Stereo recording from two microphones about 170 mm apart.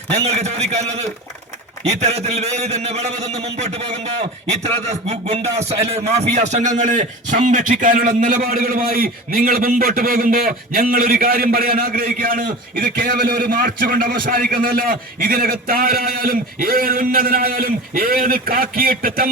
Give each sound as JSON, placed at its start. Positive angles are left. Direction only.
{"t": 0.1, "sound": "a man's voice", "side_deg": -40}